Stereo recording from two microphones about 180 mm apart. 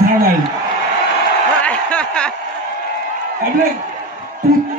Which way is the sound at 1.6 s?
5° left (ahead or behind).